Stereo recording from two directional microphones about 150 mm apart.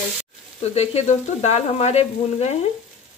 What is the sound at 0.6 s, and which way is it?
Frying, 45° left (ahead or behind).